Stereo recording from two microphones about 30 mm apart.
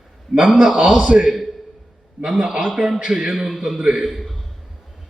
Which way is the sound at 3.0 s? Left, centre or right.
Right.